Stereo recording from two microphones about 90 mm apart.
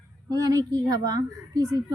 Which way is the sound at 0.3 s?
45° right (ahead or behind).